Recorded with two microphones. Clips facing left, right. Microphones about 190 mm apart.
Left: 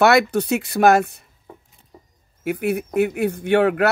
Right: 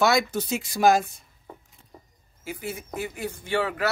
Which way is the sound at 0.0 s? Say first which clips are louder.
Left 7 dB; 65° left (ahead or behind).